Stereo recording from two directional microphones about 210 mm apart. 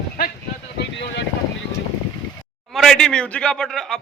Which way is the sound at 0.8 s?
55° left (ahead or behind).